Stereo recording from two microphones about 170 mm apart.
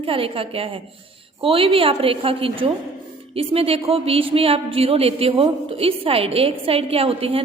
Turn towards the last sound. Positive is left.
turn(degrees=-35)  # may be behind; listen again after turning